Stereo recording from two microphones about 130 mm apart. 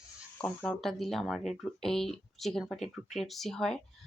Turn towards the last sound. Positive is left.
turn(degrees=5)  # may be behind; listen again after turning